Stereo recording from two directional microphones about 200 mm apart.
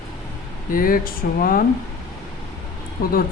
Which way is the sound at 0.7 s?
45° left (ahead or behind).